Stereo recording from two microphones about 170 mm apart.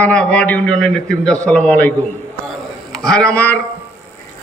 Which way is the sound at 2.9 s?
5° left (ahead or behind).